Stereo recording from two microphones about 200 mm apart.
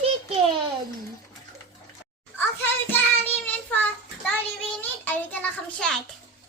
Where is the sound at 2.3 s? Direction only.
10° left (ahead or behind).